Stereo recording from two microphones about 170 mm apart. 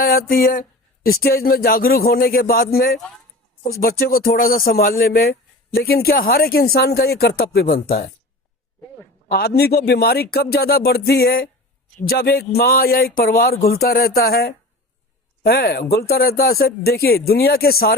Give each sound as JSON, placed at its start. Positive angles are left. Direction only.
{"t": 0.0, "sound": "a sound", "side_deg": 60}
{"t": 1.0, "sound": "speech", "side_deg": 65}
{"t": 9.6, "sound": "music", "side_deg": 70}
{"t": 12.0, "sound": "speech", "side_deg": 65}